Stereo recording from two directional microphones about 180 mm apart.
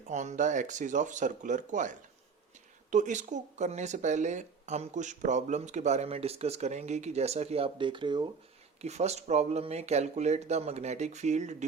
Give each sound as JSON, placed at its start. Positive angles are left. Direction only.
{"t": 0.1, "sound": "speech", "side_deg": -40}
{"t": 8.8, "sound": "speech", "side_deg": -35}